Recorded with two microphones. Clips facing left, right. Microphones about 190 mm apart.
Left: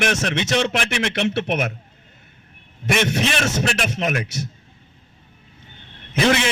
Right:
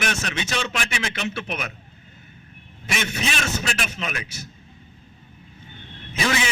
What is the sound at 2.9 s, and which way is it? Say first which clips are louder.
A man's voice: left 7 dB; 65° left (ahead or behind).